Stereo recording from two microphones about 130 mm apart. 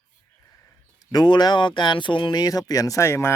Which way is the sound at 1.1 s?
35° left (ahead or behind).